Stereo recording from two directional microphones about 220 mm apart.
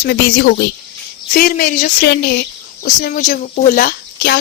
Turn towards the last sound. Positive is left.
turn(degrees=40)  # may be behind; listen again after turning